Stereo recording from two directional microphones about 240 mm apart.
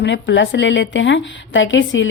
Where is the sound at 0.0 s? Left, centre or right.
Left.